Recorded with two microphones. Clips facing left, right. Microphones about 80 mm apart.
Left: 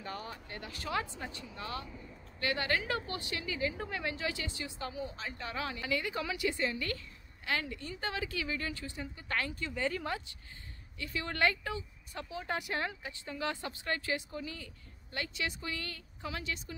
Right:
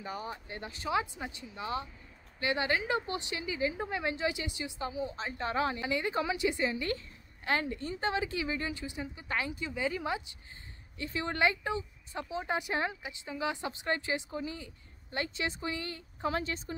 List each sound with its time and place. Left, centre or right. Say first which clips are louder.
0.0 s speech: right 3 dB; centre
16.3 s a woman's voice: right 6 dB; right